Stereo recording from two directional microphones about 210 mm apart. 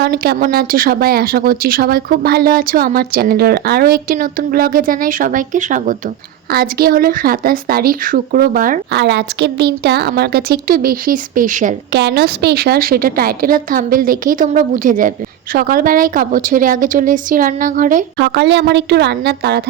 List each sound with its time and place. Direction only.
0.0 s speech: 50° right (ahead or behind)
9.0 s speech: 55° right (ahead or behind); by 11.7 s 40° right (ahead or behind)
11.9 s speech: 55° right (ahead or behind)